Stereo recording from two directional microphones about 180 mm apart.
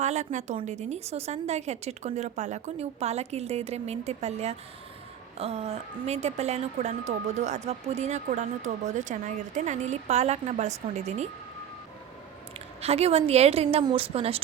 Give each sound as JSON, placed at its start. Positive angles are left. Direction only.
{"t": 0.0, "sound": "speech", "side_deg": -40}
{"t": 12.8, "sound": "speech", "side_deg": -35}